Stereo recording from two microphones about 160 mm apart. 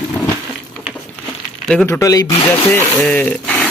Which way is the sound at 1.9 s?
20° left (ahead or behind).